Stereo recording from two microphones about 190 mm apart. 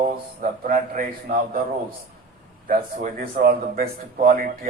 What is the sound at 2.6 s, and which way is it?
A man's voice, 45° right (ahead or behind).